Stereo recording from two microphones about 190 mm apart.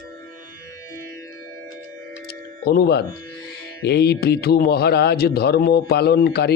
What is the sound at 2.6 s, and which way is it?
A man's voice, 55° left (ahead or behind).